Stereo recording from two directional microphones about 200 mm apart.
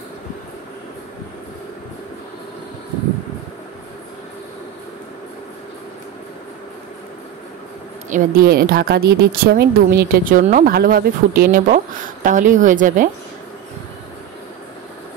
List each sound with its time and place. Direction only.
8.1 s a woman's voice: 45° right (ahead or behind)